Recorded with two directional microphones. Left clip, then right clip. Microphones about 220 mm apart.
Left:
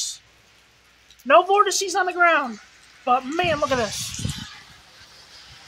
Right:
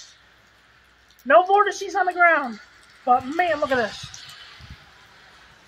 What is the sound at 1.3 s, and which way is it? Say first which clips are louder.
A woman's voice: even; 15° left (ahead or behind).